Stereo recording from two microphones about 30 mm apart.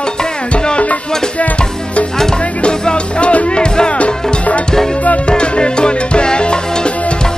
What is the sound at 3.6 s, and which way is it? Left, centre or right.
Music, left.